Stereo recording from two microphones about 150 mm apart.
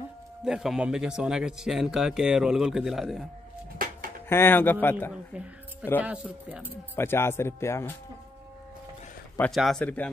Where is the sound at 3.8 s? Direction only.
70° right (ahead or behind).